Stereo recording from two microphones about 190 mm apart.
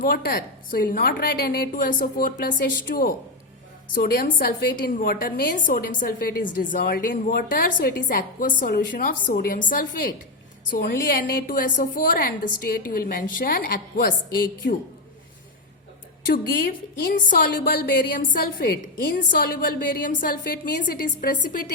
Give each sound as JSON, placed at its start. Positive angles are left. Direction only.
{"t": 0.0, "sound": "a woman's voice", "side_deg": 50}
{"t": 16.2, "sound": "a woman's voice", "side_deg": 50}